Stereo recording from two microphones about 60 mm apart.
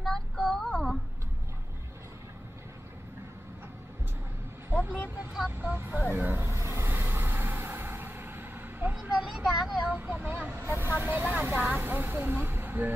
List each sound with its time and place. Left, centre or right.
0.0 s child singing: centre
4.7 s vehicle: right
5.6 s speech: right
6.4 s vehicle: right
9.2 s vehicle: centre
9.8 s vehicle: right
11.5 s speech: right